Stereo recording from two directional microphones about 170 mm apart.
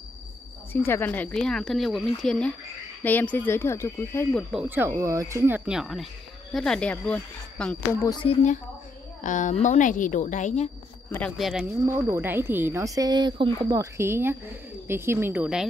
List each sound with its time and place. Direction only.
0.7 s speech: 15° left (ahead or behind)
4.5 s speech: 10° right (ahead or behind)
5.7 s speech: centre (ahead or behind)
8.0 s speech: 25° left (ahead or behind)
9.2 s a woman's voice: 45° left (ahead or behind)
11.1 s speech: 5° left (ahead or behind)
11.8 s speech: 15° right (ahead or behind)